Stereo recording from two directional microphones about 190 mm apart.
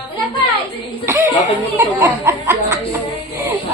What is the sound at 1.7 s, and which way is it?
Speech, 15° right (ahead or behind).